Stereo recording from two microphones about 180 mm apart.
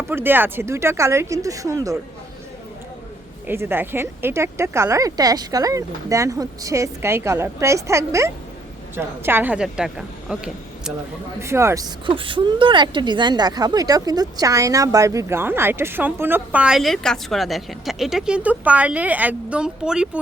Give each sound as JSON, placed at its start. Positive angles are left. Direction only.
{"t": 0.1, "sound": "speech", "side_deg": -10}
{"t": 3.4, "sound": "a woman's voice", "side_deg": -10}
{"t": 11.3, "sound": "speech", "side_deg": -15}
{"t": 12.0, "sound": "speech", "side_deg": -30}